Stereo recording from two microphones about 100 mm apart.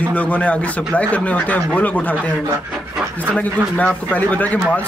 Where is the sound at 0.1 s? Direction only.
15° left (ahead or behind).